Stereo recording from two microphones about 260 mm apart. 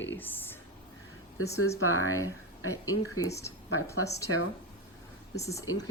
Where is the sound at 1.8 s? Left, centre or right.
Left.